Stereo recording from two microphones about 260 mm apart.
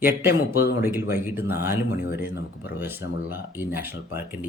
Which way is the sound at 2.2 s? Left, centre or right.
Left.